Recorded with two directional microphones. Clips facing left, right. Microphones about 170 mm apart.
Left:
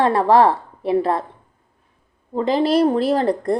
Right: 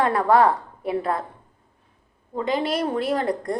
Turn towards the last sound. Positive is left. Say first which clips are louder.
# left 5 dB
turn(degrees=30)  # may be behind; listen again after turning